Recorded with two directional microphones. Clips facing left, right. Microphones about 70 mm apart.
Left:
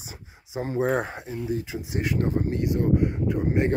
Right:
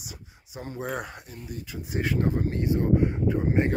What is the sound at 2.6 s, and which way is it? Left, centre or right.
Speech, right.